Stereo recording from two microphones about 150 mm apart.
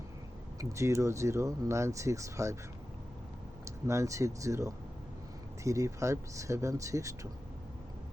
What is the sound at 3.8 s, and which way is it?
Speech, 20° right (ahead or behind).